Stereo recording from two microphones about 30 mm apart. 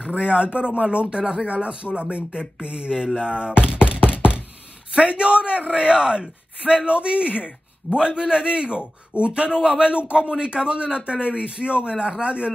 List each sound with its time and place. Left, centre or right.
0.2 s a man's voice: right
3.6 s a sound: right
4.9 s a man's voice: right
7.4 s a man's voice: right
9.5 s a man's voice: right